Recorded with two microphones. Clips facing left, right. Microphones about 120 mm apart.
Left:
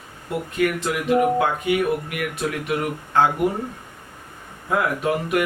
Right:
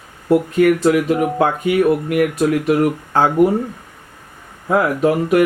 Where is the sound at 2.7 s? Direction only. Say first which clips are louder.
Right 9 dB; 35° right (ahead or behind).